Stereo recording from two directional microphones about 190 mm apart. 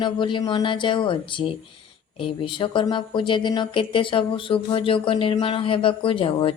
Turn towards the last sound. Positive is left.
turn(degrees=25)  # may be behind; listen again after turning